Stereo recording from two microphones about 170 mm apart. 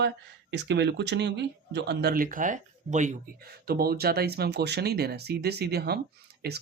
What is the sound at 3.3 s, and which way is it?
Speech, 65° right (ahead or behind).